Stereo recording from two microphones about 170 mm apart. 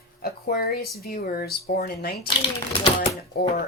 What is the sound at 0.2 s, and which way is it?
Speech, 65° left (ahead or behind).